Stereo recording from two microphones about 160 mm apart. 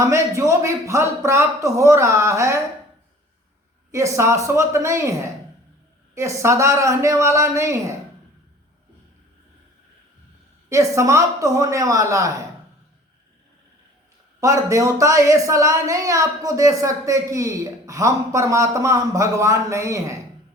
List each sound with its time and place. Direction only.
0.0 s speech: 20° right (ahead or behind)
3.9 s speech: 20° right (ahead or behind)
10.7 s speech: 20° right (ahead or behind)
14.4 s speech: 20° right (ahead or behind)